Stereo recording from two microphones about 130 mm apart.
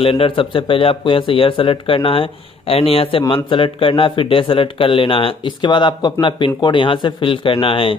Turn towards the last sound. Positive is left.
turn(degrees=45)  # may be behind; listen again after turning